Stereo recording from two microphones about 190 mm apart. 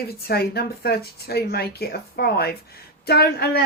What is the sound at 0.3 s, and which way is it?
Speech, 55° left (ahead or behind).